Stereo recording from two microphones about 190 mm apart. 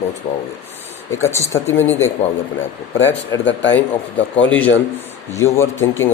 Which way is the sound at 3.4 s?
75° left (ahead or behind).